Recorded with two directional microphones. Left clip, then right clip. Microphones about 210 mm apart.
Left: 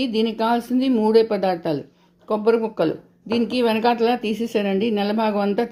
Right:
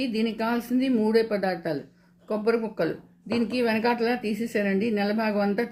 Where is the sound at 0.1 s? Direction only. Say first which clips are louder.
Left 7 dB; 25° left (ahead or behind).